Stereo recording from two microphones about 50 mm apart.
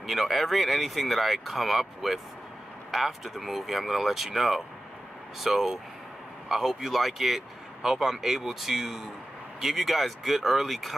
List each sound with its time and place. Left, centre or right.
0.0 s speech: centre